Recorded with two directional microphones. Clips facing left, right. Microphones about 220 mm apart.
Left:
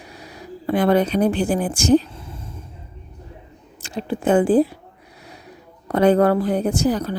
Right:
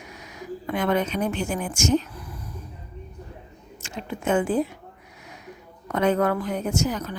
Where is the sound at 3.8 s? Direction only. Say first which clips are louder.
Left 7 dB; 35° left (ahead or behind).